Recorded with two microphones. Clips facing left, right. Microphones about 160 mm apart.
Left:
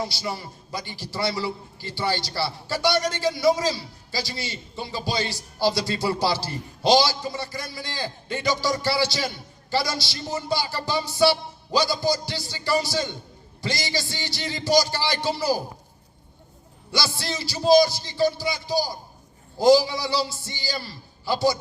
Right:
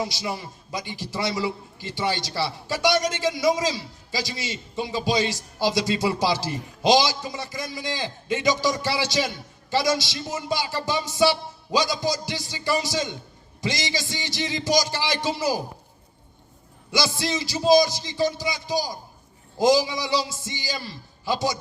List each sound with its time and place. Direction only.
0.1 s a man's voice: 20° right (ahead or behind)
16.9 s a man's voice: 20° right (ahead or behind)